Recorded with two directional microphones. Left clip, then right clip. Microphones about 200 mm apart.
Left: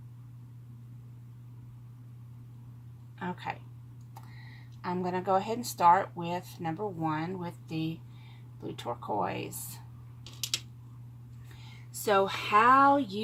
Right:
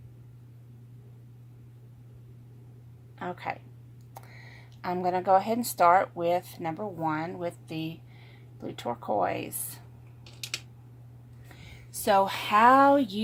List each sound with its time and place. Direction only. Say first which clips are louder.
3.2 s speech: right 2 dB; 45° right (ahead or behind)
4.8 s speech: right 5 dB; 50° right (ahead or behind)
12.0 s speech: right 3 dB; 50° right (ahead or behind)